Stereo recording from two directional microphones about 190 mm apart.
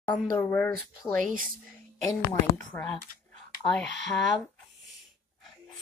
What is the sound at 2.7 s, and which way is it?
Speech, 10° left (ahead or behind).